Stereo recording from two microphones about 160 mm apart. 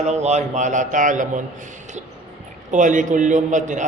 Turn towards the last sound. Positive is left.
turn(degrees=-50)  # may be behind; listen again after turning